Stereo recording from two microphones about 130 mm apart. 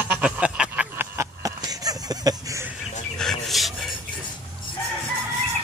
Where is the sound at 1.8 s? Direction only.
30° right (ahead or behind).